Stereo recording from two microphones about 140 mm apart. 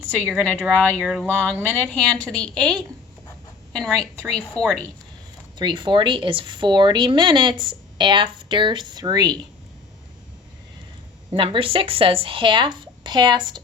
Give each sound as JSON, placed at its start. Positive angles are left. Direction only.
{"t": 0.3, "sound": "a woman's voice", "side_deg": 5}
{"t": 5.5, "sound": "speech", "side_deg": -35}
{"t": 11.3, "sound": "speech", "side_deg": -40}